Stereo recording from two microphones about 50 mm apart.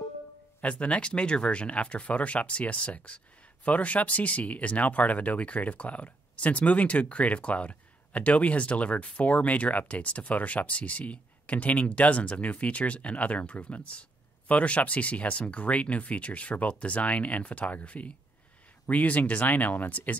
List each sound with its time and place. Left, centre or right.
0.6 s speech: left